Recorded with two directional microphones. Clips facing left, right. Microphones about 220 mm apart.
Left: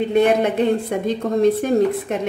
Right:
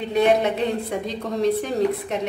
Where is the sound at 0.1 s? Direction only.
50° left (ahead or behind).